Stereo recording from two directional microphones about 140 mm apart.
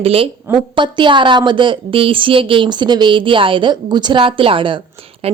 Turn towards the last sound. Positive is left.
turn(degrees=-40)  # may be behind; listen again after turning